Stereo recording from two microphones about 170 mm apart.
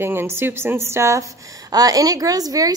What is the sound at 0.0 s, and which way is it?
A woman's voice, 15° right (ahead or behind).